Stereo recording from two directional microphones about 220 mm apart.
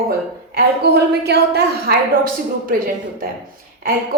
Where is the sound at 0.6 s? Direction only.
45° right (ahead or behind).